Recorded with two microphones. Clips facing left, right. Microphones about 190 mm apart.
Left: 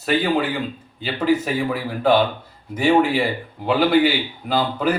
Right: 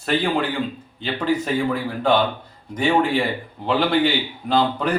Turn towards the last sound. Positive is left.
turn(degrees=5)  # may be behind; listen again after turning